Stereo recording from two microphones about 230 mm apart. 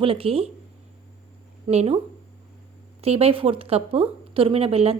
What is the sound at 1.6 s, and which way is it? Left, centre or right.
Speech, right.